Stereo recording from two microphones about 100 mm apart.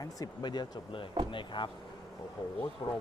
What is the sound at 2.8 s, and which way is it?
Speech, 50° left (ahead or behind).